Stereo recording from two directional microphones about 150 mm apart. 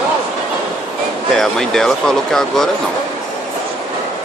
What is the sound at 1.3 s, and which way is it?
Speech, 5° left (ahead or behind).